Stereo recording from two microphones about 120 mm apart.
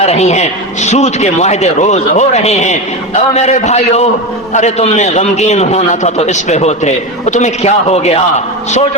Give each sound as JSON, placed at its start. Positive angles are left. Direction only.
{"t": 0.0, "sound": "a man's voice", "side_deg": 65}